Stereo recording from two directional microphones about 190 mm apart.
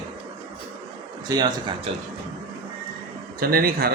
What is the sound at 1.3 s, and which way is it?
Speech, 20° right (ahead or behind).